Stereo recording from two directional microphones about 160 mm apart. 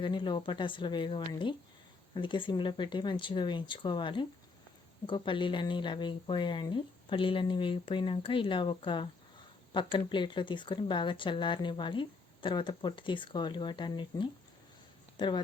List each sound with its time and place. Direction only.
0.0 s speech: 30° left (ahead or behind)